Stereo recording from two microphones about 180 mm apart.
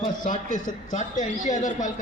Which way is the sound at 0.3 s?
45° left (ahead or behind).